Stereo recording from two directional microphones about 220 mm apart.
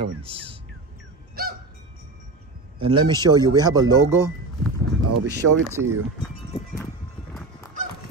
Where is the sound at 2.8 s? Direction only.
20° right (ahead or behind).